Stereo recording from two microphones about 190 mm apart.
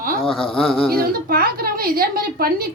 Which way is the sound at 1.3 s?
50° right (ahead or behind).